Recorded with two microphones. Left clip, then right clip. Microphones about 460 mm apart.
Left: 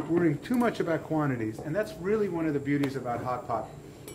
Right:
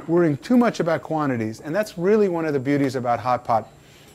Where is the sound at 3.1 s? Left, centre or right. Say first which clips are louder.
Right 10 dB; right.